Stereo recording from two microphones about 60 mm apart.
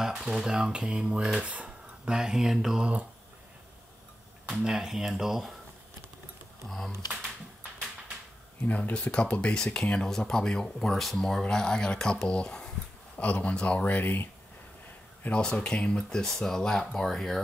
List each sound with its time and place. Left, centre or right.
0.0 s speech: centre
2.0 s speech: centre
2.8 s speech: right
4.5 s speech: centre
8.6 s speech: left
15.2 s speech: centre